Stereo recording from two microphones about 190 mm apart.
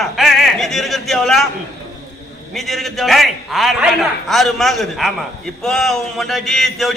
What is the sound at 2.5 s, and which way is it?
A man's voice, centre (ahead or behind).